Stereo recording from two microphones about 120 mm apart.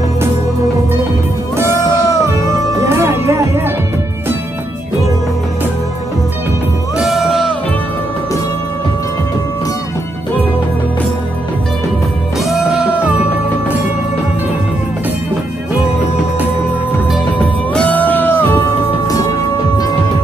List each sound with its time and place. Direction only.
2.2 s music: 25° right (ahead or behind)
7.0 s music: centre (ahead or behind)
12.4 s music: 5° right (ahead or behind)
17.7 s music: 15° left (ahead or behind)